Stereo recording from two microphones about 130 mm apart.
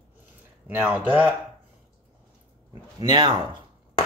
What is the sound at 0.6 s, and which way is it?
Speech, 15° right (ahead or behind).